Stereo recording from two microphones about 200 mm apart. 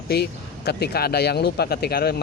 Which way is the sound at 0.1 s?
55° left (ahead or behind).